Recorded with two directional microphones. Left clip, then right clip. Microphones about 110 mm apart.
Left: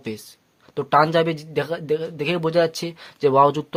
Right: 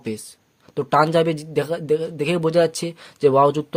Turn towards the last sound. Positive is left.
turn(degrees=-25)  # may be behind; listen again after turning